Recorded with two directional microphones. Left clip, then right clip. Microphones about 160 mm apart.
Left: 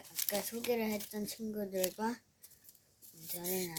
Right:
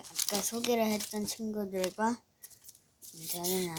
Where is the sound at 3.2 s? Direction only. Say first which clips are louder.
Right 7 dB; 15° right (ahead or behind).